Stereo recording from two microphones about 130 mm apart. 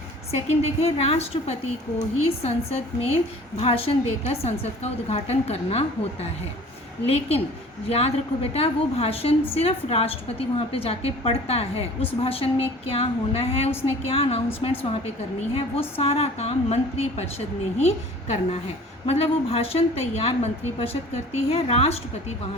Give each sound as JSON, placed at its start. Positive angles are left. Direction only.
{"t": 0.3, "sound": "a woman's voice", "side_deg": 50}